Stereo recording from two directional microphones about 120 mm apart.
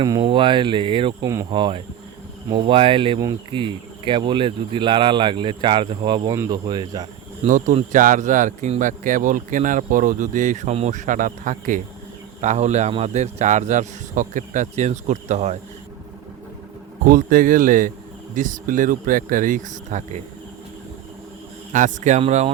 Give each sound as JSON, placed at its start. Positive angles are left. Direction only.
{"t": 0.0, "sound": "speech", "side_deg": -35}
{"t": 1.2, "sound": "speech", "side_deg": -25}
{"t": 1.5, "sound": "speech", "side_deg": -40}
{"t": 7.4, "sound": "speech", "side_deg": -85}
{"t": 12.4, "sound": "speech", "side_deg": -75}
{"t": 18.3, "sound": "speech", "side_deg": -90}
{"t": 21.7, "sound": "speech", "side_deg": -90}
{"t": 22.3, "sound": "speech", "side_deg": -70}